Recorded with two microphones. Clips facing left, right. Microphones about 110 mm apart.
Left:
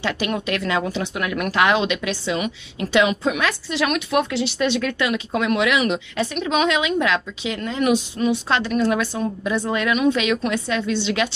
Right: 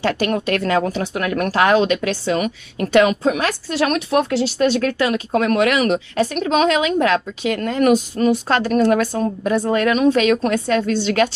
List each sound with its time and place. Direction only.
0.0 s speech: 45° right (ahead or behind)